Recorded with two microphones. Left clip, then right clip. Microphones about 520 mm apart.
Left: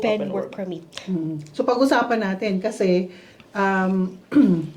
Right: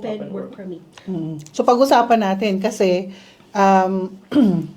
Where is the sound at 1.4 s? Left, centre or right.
Right.